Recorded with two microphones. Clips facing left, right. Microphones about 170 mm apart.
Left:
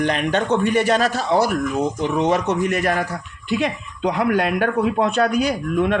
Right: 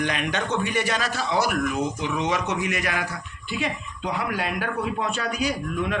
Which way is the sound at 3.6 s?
55° left (ahead or behind).